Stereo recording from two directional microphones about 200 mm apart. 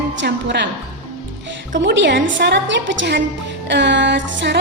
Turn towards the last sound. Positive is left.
turn(degrees=-60)  # may be behind; listen again after turning